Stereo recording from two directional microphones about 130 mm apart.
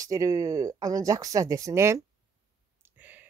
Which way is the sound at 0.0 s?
25° right (ahead or behind).